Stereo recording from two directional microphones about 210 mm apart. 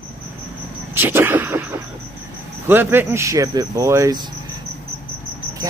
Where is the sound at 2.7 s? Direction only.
10° right (ahead or behind).